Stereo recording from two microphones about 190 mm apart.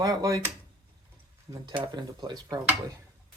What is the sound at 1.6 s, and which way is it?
Speech, 25° right (ahead or behind).